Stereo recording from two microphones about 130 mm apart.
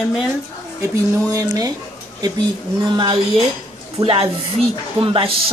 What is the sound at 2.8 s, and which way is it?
Speech, 35° right (ahead or behind).